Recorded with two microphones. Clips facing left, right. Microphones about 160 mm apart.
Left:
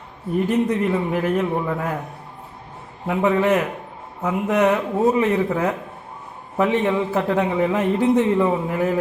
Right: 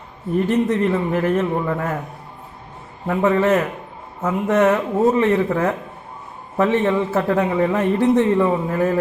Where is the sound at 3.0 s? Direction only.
15° left (ahead or behind).